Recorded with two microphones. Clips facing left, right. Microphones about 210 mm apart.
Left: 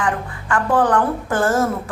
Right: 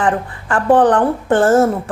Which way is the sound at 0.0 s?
35° right (ahead or behind).